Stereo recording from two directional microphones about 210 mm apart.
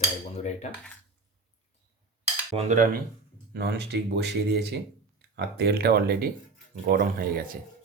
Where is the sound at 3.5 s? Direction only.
50° right (ahead or behind).